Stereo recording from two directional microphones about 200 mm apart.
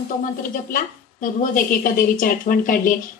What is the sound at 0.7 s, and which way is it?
A woman's voice, 45° left (ahead or behind).